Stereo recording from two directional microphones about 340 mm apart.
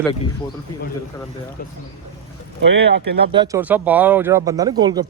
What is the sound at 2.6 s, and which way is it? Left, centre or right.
Speech, right.